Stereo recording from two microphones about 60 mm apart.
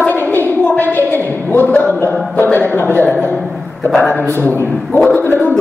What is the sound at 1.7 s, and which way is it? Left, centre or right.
Speech, left.